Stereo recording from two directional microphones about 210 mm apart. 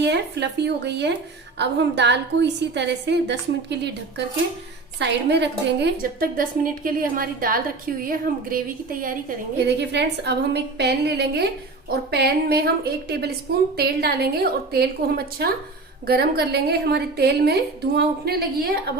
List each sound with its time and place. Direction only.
0.0 s a woman's voice: 55° right (ahead or behind)
4.9 s a woman's voice: 55° right (ahead or behind)
9.6 s a woman's voice: 55° right (ahead or behind)